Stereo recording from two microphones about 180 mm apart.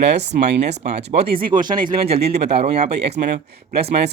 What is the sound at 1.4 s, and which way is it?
Speech, 50° right (ahead or behind).